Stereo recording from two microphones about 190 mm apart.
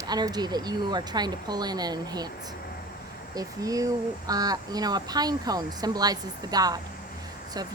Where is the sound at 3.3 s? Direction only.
20° right (ahead or behind).